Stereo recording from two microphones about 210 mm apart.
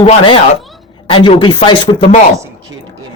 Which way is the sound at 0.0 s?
25° left (ahead or behind).